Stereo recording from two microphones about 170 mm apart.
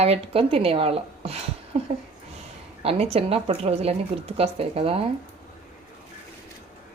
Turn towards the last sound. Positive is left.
turn(degrees=-35)  # may be behind; listen again after turning